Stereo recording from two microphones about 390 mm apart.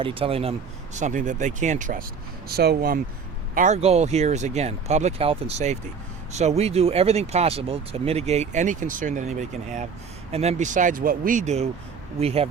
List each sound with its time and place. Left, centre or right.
0.0 s speech: centre